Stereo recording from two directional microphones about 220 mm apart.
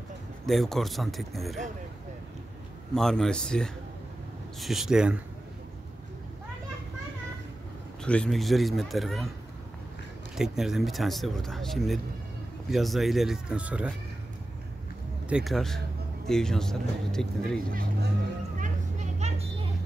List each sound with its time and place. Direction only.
0.5 s speech: centre (ahead or behind)
2.9 s speech: centre (ahead or behind)
8.0 s speech: 5° left (ahead or behind)
10.3 s speech: centre (ahead or behind)
15.2 s speech: centre (ahead or behind)
17.6 s music: 40° right (ahead or behind)
18.6 s children playing: 30° right (ahead or behind)